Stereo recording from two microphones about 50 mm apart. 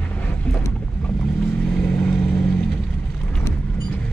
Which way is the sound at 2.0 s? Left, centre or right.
Left.